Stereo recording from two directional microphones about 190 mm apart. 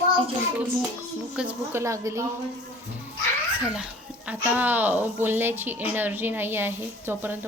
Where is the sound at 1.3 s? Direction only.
10° right (ahead or behind).